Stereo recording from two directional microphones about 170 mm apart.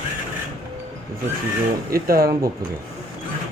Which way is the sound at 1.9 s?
60° right (ahead or behind).